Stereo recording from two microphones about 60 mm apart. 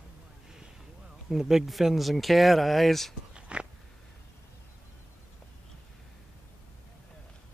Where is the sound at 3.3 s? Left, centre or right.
Centre.